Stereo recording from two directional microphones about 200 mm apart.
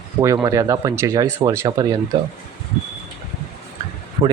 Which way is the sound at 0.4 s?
15° right (ahead or behind).